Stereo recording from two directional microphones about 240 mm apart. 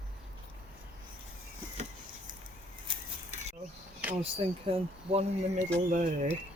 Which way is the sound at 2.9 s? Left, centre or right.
Right.